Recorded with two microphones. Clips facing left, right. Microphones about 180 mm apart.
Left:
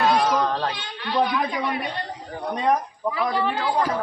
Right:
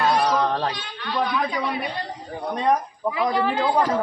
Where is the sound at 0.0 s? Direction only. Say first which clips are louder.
Left 1 dB; 20° left (ahead or behind).